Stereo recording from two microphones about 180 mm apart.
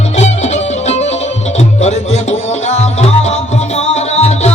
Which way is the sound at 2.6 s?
35° left (ahead or behind).